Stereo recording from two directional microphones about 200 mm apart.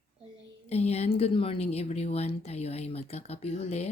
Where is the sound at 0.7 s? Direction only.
30° left (ahead or behind).